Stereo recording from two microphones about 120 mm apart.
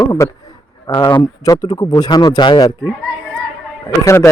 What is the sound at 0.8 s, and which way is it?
Speech, 40° left (ahead or behind).